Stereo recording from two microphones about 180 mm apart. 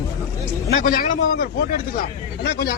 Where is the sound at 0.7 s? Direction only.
50° left (ahead or behind).